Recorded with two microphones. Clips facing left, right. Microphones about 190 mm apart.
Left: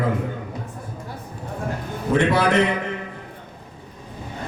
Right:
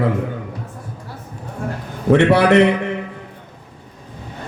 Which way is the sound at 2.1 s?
70° right (ahead or behind).